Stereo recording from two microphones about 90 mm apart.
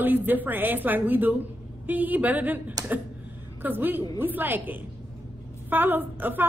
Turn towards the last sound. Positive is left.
turn(degrees=-20)  # may be behind; listen again after turning